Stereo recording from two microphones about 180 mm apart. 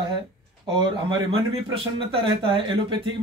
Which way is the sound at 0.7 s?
25° right (ahead or behind).